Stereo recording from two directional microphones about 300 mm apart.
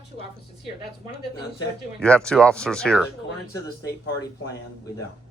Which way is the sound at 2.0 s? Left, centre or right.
Centre.